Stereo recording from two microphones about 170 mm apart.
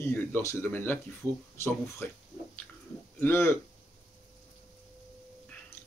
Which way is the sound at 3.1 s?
15° left (ahead or behind).